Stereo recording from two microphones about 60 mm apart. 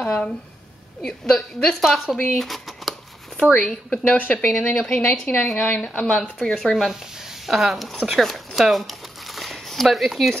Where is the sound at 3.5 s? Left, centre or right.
Centre.